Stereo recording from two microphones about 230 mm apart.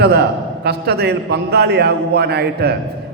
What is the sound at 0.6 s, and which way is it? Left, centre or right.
A man's voice, right.